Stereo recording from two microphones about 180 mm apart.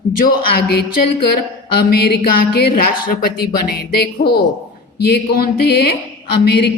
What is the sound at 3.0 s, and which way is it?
Speech, 55° left (ahead or behind).